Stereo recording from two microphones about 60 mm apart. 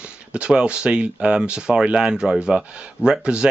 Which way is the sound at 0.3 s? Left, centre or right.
Centre.